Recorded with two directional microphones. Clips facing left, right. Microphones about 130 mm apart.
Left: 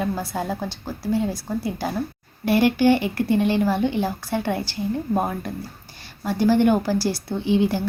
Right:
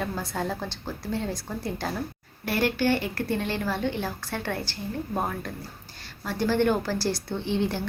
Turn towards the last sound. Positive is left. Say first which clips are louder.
# left 6 dB
turn(degrees=10)  # may be behind; listen again after turning